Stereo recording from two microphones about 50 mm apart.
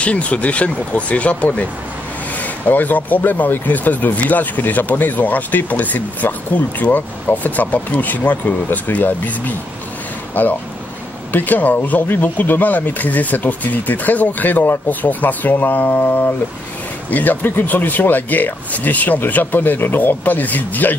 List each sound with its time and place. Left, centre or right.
0.0 s speech: left